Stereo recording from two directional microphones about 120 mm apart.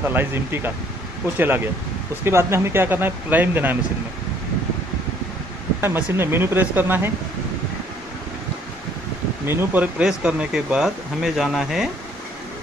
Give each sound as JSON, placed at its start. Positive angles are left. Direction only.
{"t": 0.0, "sound": "speech", "side_deg": -20}
{"t": 5.8, "sound": "speech", "side_deg": -20}
{"t": 9.5, "sound": "speech", "side_deg": -15}